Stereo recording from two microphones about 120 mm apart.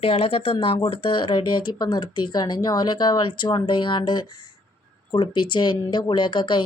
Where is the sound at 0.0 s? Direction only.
55° left (ahead or behind).